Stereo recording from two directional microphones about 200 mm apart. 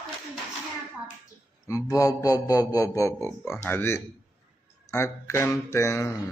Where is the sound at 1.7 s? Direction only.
15° left (ahead or behind).